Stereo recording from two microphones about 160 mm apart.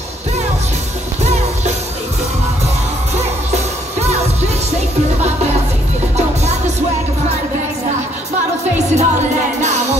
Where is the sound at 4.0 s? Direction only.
45° right (ahead or behind).